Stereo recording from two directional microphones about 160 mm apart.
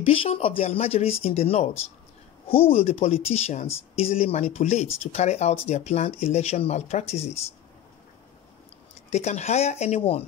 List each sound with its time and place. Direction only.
0.0 s speech: 35° left (ahead or behind)
9.1 s speech: 45° left (ahead or behind)